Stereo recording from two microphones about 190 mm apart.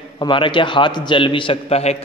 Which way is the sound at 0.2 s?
25° left (ahead or behind).